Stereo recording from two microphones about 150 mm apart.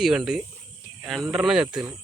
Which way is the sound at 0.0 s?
5° right (ahead or behind).